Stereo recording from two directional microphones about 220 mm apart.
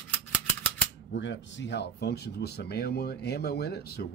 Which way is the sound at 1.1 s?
55° left (ahead or behind).